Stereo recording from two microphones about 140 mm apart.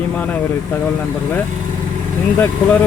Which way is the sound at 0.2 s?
10° left (ahead or behind).